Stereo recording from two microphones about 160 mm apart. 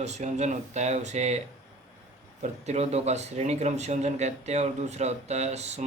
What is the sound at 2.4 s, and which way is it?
Speech, 45° right (ahead or behind).